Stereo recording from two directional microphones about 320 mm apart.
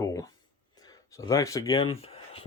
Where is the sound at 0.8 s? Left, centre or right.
Centre.